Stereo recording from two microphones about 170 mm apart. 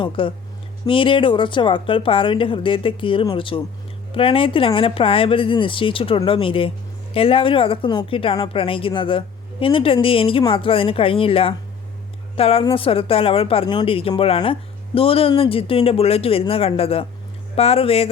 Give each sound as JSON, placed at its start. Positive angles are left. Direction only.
{"t": 0.0, "sound": "speech", "side_deg": 30}